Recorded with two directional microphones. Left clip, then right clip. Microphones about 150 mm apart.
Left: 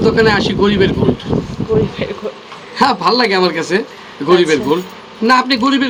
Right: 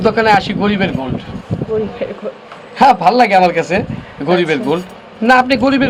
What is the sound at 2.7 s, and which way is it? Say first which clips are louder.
A man's voice: right 4 dB; 55° right (ahead or behind).